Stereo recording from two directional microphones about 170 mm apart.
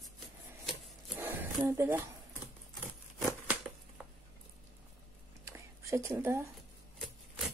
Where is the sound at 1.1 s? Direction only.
10° right (ahead or behind).